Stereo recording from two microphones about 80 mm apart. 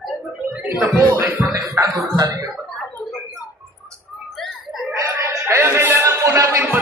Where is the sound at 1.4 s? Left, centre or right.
Right.